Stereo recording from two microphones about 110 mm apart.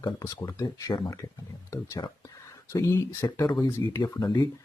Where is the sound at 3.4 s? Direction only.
40° left (ahead or behind).